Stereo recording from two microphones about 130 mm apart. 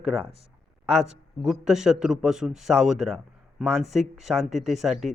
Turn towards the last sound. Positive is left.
turn(degrees=0)  # may be behind; listen again after turning